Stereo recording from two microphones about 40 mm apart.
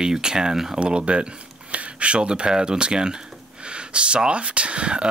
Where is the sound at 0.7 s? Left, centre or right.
Right.